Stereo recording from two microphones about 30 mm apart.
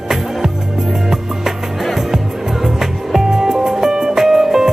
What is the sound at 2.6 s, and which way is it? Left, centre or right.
Music, centre.